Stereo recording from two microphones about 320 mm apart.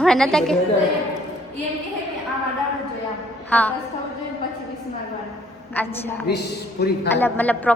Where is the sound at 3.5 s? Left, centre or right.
Centre.